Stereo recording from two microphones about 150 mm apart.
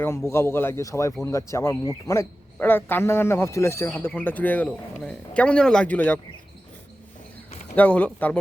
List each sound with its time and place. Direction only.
0.0 s a man's voice: 20° left (ahead or behind)
7.8 s a man's voice: 10° left (ahead or behind)